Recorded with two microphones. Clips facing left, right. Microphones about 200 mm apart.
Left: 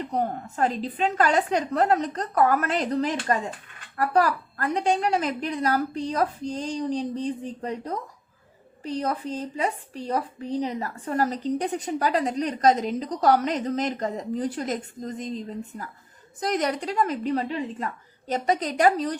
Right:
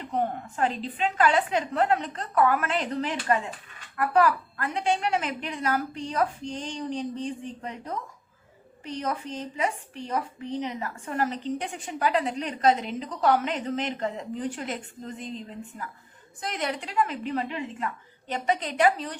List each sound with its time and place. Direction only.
0.1 s speech: 40° left (ahead or behind)